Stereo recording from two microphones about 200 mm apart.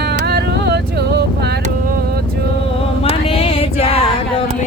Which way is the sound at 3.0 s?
30° left (ahead or behind).